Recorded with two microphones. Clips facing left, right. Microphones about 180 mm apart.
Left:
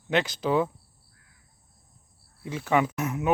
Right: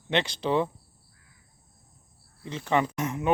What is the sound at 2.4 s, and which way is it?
Speech, 5° left (ahead or behind).